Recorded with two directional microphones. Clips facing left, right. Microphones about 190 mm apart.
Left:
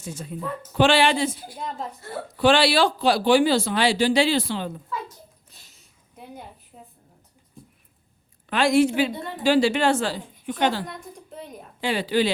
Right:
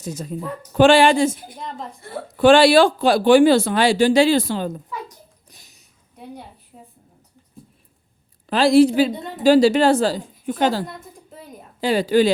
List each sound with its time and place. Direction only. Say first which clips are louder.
0.0 s a woman's voice: right 4 dB; 40° right (ahead or behind)
1.5 s a woman's voice: even; centre (ahead or behind)
2.4 s speech: right 7 dB; 50° right (ahead or behind)
4.9 s a sound: even; 15° right (ahead or behind)
6.7 s a woman's voice: right 5 dB; centre (ahead or behind)
8.4 s a woman's voice: right 5 dB; 35° right (ahead or behind)
9.1 s a woman's voice: right 1 dB; 20° right (ahead or behind)
9.4 s a woman's voice: right 6 dB; 40° right (ahead or behind)
10.8 s a sound: even; centre (ahead or behind)
11.8 s a woman's voice: right 6 dB; 40° right (ahead or behind)